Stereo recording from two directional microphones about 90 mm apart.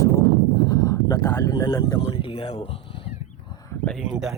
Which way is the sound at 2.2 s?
75° left (ahead or behind).